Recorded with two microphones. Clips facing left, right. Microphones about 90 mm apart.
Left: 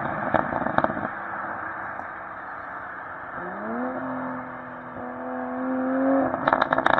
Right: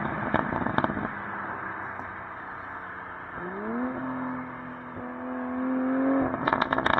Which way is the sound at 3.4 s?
30° left (ahead or behind).